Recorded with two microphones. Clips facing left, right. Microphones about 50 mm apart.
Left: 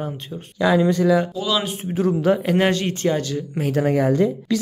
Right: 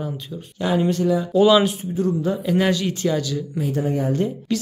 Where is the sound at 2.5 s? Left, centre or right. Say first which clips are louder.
Left 1 dB; left.